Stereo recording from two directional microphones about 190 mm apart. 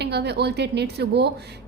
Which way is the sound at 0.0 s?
60° right (ahead or behind).